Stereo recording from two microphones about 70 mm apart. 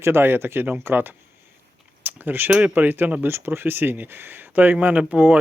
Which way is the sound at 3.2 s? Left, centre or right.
Right.